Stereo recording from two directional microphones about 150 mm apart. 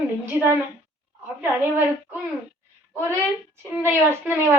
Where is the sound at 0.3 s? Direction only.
15° right (ahead or behind).